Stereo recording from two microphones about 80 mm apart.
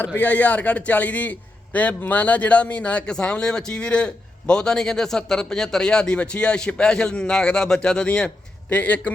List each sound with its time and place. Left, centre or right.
0.0 s a man's voice: centre